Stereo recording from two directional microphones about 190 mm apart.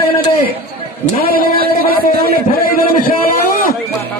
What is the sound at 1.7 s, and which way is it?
A man's voice, 50° left (ahead or behind).